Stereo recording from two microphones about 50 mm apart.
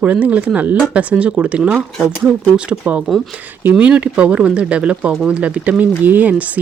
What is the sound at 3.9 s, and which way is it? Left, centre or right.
Speech, right.